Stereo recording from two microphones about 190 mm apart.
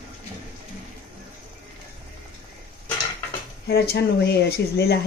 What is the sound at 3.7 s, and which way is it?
Speech, 60° left (ahead or behind).